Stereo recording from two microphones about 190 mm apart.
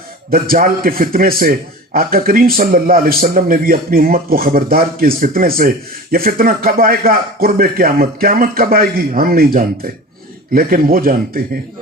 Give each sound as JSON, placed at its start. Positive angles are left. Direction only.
{"t": 0.3, "sound": "a man's voice", "side_deg": -50}